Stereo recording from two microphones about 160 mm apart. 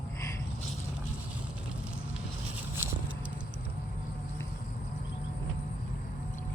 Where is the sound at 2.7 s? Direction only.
10° right (ahead or behind).